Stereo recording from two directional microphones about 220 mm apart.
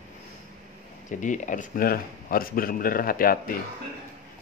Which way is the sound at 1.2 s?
35° left (ahead or behind).